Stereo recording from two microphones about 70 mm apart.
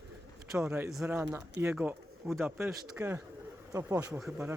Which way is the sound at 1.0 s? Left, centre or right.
Right.